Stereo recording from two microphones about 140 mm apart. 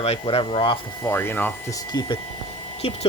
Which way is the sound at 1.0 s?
15° left (ahead or behind).